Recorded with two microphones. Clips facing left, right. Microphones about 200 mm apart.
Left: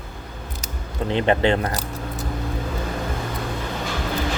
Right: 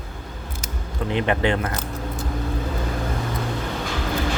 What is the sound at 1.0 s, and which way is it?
Speech, 30° left (ahead or behind).